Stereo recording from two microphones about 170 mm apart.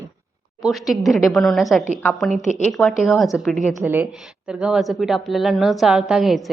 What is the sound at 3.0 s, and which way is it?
A woman's voice, centre (ahead or behind).